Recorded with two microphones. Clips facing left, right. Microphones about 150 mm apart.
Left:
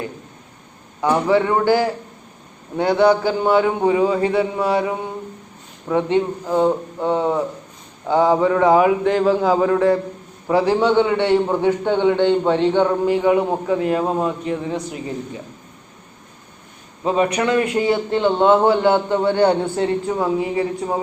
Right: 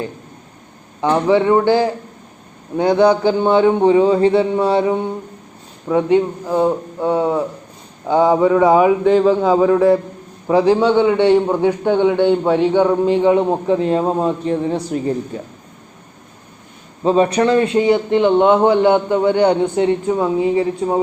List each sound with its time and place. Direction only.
1.3 s a man's voice: 20° right (ahead or behind)
5.9 s a man's voice: 10° right (ahead or behind)
9.0 s a man's voice: 5° left (ahead or behind)
9.5 s a man's voice: 15° right (ahead or behind)
13.1 s a man's voice: 25° right (ahead or behind)
17.0 s a man's voice: 30° right (ahead or behind)